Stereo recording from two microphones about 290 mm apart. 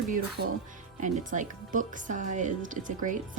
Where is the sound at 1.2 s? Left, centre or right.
Right.